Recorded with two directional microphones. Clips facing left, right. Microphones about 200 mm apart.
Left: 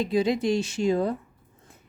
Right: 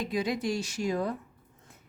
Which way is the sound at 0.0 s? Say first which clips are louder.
Left 6 dB; 25° left (ahead or behind).